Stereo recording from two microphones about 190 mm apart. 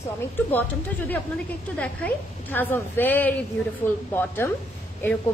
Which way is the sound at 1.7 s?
5° left (ahead or behind).